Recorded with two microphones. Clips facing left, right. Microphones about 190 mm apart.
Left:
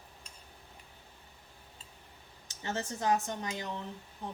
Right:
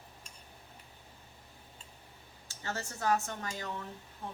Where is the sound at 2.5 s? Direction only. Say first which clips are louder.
Left 3 dB; 20° left (ahead or behind).